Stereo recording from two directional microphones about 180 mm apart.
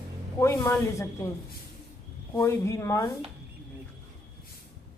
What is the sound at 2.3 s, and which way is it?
Speech, 15° left (ahead or behind).